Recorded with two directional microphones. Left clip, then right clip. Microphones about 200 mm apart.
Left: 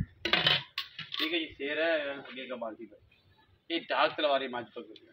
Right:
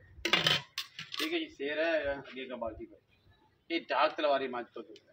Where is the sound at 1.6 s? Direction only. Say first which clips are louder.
Left 1 dB; 15° left (ahead or behind).